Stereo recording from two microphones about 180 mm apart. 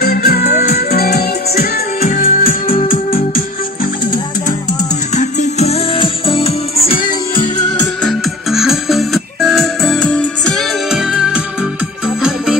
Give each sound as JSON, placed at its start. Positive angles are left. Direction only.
{"t": 0.0, "sound": "music", "side_deg": 60}
{"t": 5.1, "sound": "music", "side_deg": 40}
{"t": 8.0, "sound": "music", "side_deg": 0}